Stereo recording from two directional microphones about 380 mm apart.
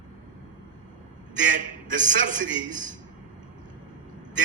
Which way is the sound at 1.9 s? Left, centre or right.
Centre.